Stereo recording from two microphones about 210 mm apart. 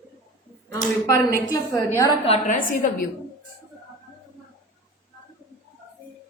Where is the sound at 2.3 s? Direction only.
40° left (ahead or behind).